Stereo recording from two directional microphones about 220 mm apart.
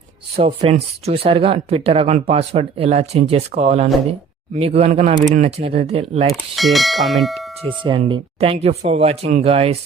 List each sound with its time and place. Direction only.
0.3 s speech: 25° right (ahead or behind)
6.6 s speech: centre (ahead or behind)
7.9 s speech: 25° right (ahead or behind)